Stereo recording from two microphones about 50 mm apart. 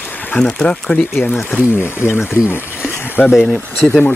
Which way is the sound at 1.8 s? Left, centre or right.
Left.